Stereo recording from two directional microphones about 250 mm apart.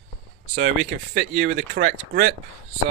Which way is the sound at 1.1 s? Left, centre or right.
Right.